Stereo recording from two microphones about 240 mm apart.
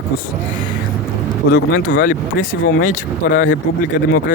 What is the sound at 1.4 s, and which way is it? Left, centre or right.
Speech, left.